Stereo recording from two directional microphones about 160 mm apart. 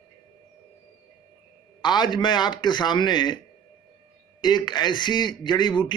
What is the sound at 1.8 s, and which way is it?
Speech, 25° left (ahead or behind).